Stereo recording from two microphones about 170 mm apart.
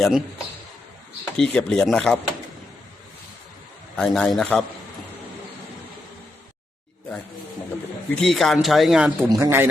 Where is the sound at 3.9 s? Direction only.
5° left (ahead or behind).